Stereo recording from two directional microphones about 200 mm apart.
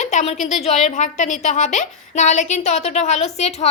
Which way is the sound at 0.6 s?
35° left (ahead or behind).